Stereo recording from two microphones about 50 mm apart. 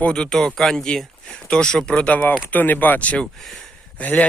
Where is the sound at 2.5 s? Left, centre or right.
Left.